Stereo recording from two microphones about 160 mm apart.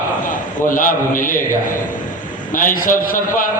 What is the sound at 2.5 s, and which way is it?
Speech, 55° left (ahead or behind).